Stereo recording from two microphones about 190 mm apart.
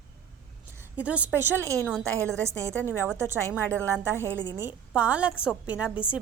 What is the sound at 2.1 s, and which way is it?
A woman's voice, 15° right (ahead or behind).